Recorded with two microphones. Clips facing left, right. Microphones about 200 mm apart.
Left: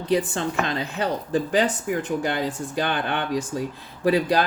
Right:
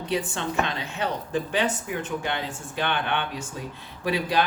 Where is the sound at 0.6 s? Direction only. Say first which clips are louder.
Left 3 dB; 35° left (ahead or behind).